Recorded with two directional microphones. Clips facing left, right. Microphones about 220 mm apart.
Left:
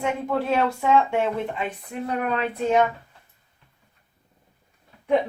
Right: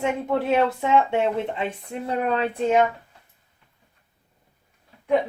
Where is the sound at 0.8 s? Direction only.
25° right (ahead or behind).